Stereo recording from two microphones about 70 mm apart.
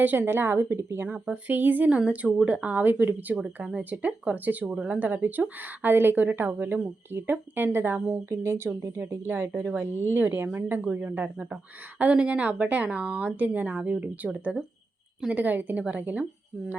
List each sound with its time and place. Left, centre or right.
0.0 s speech: right
1.0 s a woman's voice: right
3.6 s a woman's voice: centre
4.6 s speech: centre
4.9 s a woman's voice: right
9.6 s a woman's voice: right
9.8 s a woman's voice: right
10.8 s a woman's voice: centre